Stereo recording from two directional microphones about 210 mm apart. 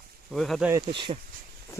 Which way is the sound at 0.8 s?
25° right (ahead or behind).